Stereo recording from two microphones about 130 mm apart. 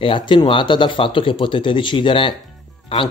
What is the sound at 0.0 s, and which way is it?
Speech, 40° left (ahead or behind).